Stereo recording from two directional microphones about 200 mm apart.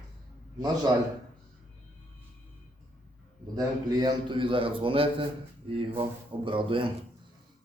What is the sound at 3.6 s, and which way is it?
A man's voice, 20° right (ahead or behind).